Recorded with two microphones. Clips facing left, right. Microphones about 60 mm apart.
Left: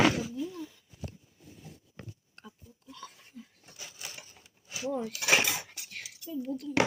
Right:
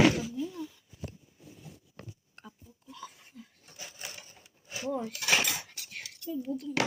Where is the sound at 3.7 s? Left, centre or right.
Right.